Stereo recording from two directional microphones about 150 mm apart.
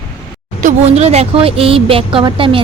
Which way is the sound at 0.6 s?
50° right (ahead or behind).